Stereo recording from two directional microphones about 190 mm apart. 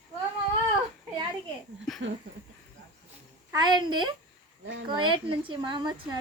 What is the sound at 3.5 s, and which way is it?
Speech, 25° right (ahead or behind).